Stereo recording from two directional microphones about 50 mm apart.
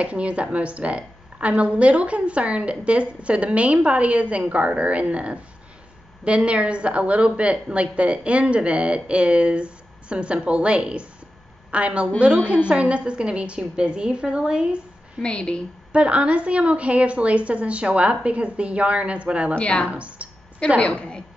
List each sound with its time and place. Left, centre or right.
0.0 s a woman's voice: right
15.2 s a woman's voice: left
15.9 s a woman's voice: right
19.5 s a woman's voice: left
19.9 s a woman's voice: right
20.8 s a woman's voice: left